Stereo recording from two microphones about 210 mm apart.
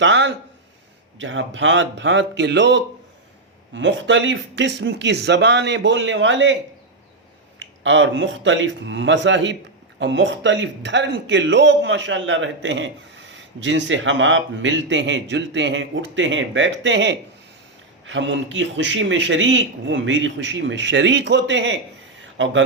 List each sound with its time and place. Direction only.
0.0 s a man's voice: 60° right (ahead or behind)
7.6 s a man's voice: 60° right (ahead or behind)